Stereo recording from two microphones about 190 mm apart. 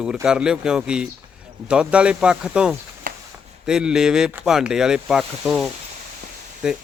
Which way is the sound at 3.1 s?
45° right (ahead or behind).